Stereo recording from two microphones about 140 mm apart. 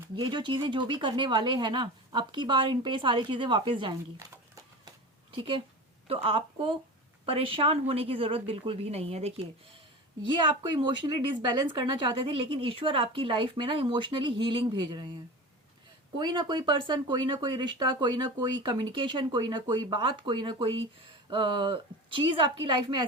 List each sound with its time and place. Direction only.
0.2 s speech: 35° right (ahead or behind)
5.3 s a woman's voice: 40° right (ahead or behind)
10.2 s speech: 35° right (ahead or behind)
16.1 s speech: 35° right (ahead or behind)